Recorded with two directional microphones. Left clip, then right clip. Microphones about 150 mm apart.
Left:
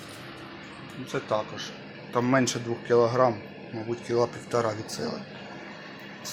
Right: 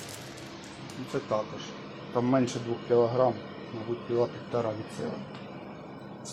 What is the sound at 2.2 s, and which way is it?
Speech, 15° left (ahead or behind).